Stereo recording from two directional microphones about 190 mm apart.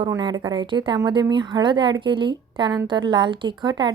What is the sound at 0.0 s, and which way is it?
A woman's voice, 25° right (ahead or behind).